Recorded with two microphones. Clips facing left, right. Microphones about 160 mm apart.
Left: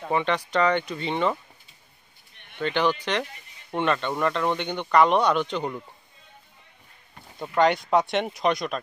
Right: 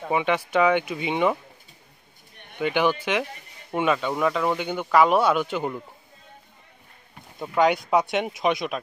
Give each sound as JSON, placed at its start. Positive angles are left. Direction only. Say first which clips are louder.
{"t": 0.0, "sound": "speech", "louder": "right 1 dB", "side_deg": -10}
{"t": 2.3, "sound": "a sound", "louder": "right 5 dB", "side_deg": -45}
{"t": 2.6, "sound": "speech", "louder": "right 2 dB", "side_deg": -10}
{"t": 7.2, "sound": "speech", "louder": "even", "side_deg": 0}